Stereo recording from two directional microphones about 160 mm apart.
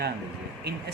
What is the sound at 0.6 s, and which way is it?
Speech, 90° right.